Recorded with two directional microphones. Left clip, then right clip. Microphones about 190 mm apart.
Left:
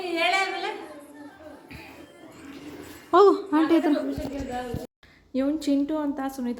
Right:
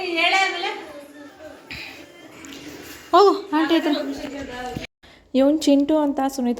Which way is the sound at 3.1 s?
15° left (ahead or behind).